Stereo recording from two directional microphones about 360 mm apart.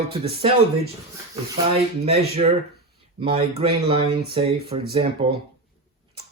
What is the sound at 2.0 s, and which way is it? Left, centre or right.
Speech, centre.